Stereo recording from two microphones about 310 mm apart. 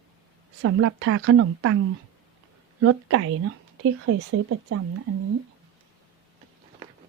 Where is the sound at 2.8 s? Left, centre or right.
Right.